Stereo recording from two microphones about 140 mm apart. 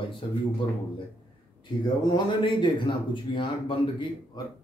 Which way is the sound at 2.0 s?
30° left (ahead or behind).